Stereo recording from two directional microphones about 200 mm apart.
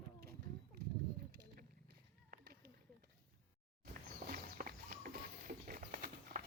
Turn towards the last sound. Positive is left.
turn(degrees=-45)  # may be behind; listen again after turning